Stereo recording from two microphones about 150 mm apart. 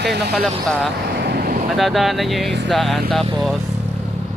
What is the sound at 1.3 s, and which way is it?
Vehicle, 85° right.